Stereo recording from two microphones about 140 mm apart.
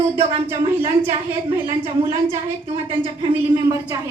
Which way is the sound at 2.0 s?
40° right (ahead or behind).